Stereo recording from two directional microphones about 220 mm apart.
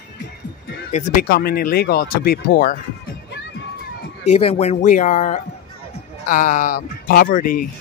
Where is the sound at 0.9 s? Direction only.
40° left (ahead or behind).